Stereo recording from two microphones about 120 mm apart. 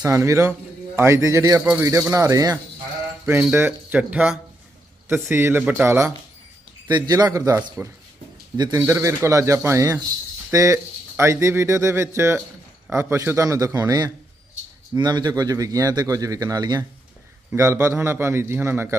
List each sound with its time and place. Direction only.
0.0 s a man's voice: 25° right (ahead or behind)
3.2 s a man's voice: 15° right (ahead or behind); by 8.8 s 35° right (ahead or behind)
8.8 s a man's voice: 25° right (ahead or behind)
17.5 s a man's voice: 20° right (ahead or behind)